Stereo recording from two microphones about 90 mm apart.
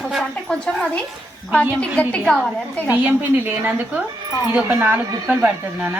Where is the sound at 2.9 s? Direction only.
20° right (ahead or behind).